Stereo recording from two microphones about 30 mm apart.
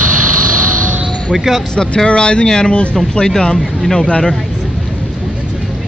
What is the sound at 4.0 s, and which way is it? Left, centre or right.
Speech, left.